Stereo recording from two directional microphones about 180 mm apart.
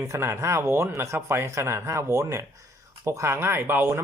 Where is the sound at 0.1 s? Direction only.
15° right (ahead or behind).